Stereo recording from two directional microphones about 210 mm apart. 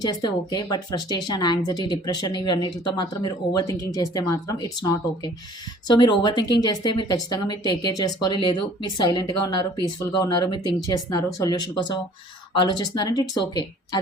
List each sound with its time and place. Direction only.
0.0 s speech: 20° left (ahead or behind)
6.0 s speech: 20° left (ahead or behind)